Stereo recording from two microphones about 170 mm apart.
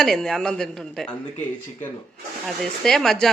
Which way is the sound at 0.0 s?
Centre (ahead or behind).